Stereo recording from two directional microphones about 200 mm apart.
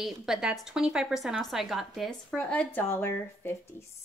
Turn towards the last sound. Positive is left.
turn(degrees=10)  # may be behind; listen again after turning